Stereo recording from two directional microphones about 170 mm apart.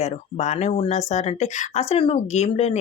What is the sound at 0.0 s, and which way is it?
Speech, 40° left (ahead or behind).